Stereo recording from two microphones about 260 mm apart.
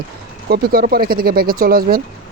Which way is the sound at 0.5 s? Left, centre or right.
Right.